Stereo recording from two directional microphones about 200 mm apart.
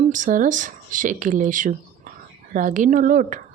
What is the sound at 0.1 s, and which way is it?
A woman's voice, 40° right (ahead or behind).